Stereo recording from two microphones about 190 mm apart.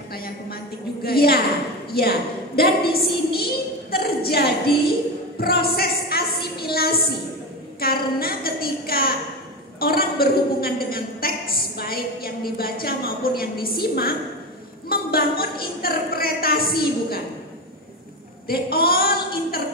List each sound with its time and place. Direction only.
0.1 s a woman's voice: 50° left (ahead or behind)
18.5 s a woman's voice: 55° left (ahead or behind)